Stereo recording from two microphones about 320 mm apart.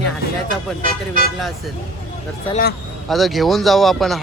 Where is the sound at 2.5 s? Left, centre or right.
Left.